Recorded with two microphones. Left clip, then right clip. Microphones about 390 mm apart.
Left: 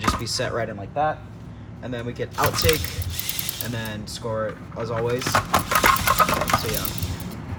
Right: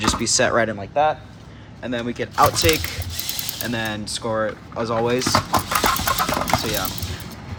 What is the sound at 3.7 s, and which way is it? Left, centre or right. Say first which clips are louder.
Speech: right 6 dB; centre.